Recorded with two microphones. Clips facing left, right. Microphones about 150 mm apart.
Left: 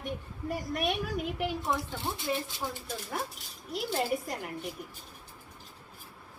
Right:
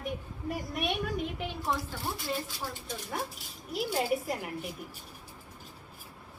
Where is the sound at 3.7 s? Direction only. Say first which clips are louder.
Right 1 dB; 5° right (ahead or behind).